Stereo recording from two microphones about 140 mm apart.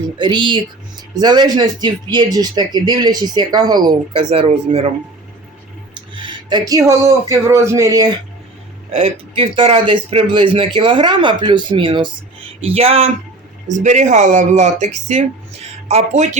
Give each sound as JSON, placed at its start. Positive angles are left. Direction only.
{"t": 0.2, "sound": "speech", "side_deg": -35}
{"t": 4.2, "sound": "speech", "side_deg": -45}
{"t": 6.1, "sound": "speech", "side_deg": -35}
{"t": 8.9, "sound": "speech", "side_deg": -50}
{"t": 13.7, "sound": "speech", "side_deg": -60}